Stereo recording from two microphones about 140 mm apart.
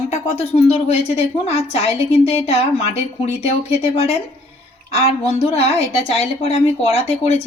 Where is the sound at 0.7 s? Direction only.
45° left (ahead or behind).